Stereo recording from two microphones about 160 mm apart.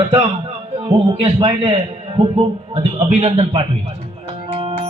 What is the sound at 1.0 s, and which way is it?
A man's voice, 35° right (ahead or behind).